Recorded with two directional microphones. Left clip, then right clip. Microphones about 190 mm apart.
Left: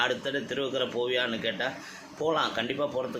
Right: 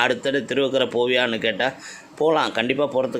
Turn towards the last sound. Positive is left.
turn(degrees=-50)  # may be behind; listen again after turning